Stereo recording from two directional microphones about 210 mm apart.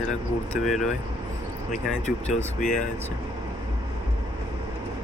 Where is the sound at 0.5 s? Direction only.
Centre (ahead or behind).